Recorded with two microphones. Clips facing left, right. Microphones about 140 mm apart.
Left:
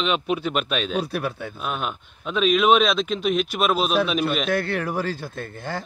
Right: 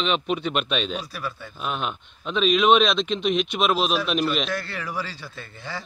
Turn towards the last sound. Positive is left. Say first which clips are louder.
# left 5 dB
turn(degrees=50)  # may be behind; listen again after turning